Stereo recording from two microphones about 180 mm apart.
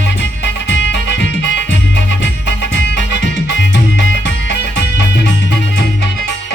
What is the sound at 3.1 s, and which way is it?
Music, 75° left (ahead or behind).